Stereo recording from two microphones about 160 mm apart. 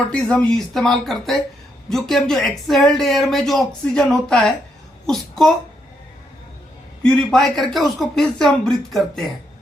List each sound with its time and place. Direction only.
0.1 s speech: 5° left (ahead or behind)
7.0 s speech: 5° left (ahead or behind)